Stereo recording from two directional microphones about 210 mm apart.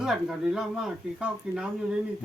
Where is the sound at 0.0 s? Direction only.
Centre (ahead or behind).